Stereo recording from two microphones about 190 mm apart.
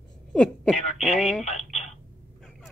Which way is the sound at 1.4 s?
35° left (ahead or behind).